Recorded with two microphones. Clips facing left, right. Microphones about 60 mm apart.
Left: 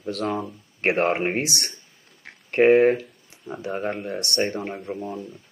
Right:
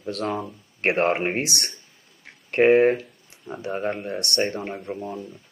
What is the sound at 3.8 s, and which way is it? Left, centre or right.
Speech, centre.